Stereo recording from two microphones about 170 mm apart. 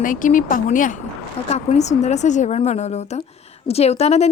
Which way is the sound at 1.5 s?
40° left (ahead or behind).